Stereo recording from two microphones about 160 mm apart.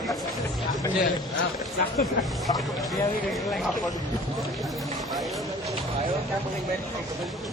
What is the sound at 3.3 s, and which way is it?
Speech, centre (ahead or behind).